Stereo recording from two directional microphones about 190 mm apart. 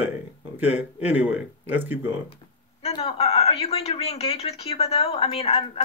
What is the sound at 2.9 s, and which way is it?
Speech, 30° left (ahead or behind).